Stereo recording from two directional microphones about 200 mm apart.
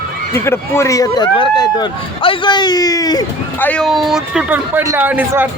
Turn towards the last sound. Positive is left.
turn(degrees=-10)  # may be behind; listen again after turning